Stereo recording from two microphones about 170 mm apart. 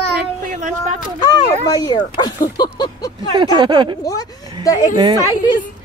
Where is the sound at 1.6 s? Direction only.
25° left (ahead or behind).